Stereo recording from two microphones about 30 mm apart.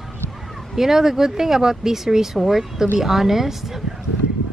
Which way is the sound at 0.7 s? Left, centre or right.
Centre.